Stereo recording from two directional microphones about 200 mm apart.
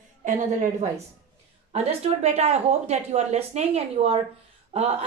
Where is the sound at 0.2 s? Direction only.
40° right (ahead or behind).